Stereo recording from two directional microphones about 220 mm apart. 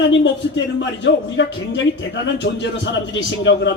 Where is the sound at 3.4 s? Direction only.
55° left (ahead or behind).